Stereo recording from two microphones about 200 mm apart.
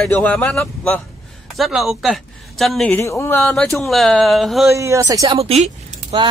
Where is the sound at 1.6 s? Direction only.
Centre (ahead or behind).